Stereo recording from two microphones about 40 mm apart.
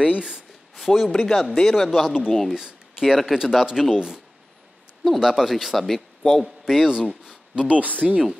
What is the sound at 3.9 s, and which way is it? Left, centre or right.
Speech, right.